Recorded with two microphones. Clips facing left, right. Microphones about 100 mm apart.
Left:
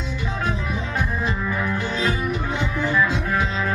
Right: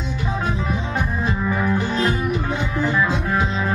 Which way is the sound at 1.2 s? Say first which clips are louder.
Right 3 dB; 20° right (ahead or behind).